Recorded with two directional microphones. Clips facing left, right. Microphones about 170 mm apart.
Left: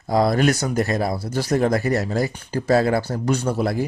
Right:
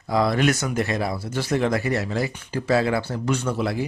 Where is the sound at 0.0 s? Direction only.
40° left (ahead or behind).